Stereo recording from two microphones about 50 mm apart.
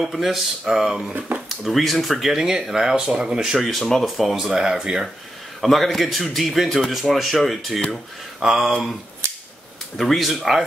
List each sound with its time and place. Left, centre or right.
0.0 s speech: centre
2.3 s speech: centre
5.6 s a man's voice: centre
8.4 s speech: centre
9.2 s scissors: right
9.9 s speech: centre